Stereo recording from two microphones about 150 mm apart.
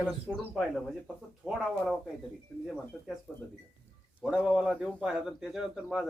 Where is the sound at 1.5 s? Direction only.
Centre (ahead or behind).